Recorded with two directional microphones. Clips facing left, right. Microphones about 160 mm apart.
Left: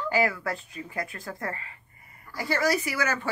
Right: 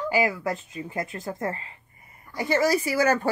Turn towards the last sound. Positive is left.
turn(degrees=-35)  # may be behind; listen again after turning